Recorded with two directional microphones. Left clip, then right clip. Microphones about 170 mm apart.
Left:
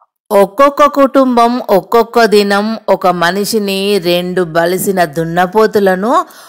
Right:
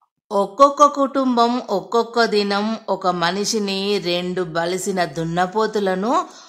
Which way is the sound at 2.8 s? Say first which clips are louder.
Left 10 dB; 35° left (ahead or behind).